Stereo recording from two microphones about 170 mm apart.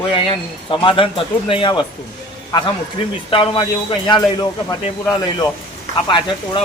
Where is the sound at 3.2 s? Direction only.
30° left (ahead or behind).